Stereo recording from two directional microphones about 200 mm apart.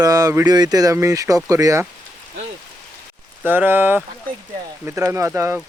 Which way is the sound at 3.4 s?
10° right (ahead or behind).